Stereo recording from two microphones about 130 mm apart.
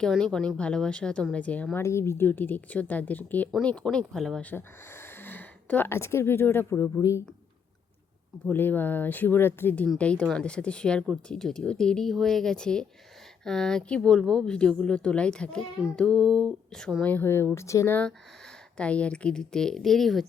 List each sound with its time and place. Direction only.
0.0 s speech: 5° left (ahead or behind)
4.4 s speech: 15° left (ahead or behind)
8.4 s speech: 15° left (ahead or behind)